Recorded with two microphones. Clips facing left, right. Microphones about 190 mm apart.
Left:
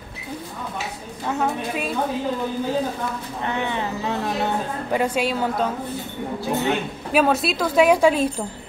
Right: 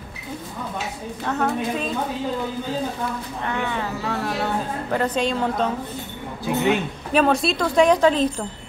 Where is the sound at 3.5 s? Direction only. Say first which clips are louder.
Left 1 dB; 20° left (ahead or behind); by 5.7 s 5° left (ahead or behind).